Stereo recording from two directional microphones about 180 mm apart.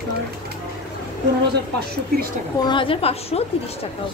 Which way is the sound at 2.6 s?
25° left (ahead or behind).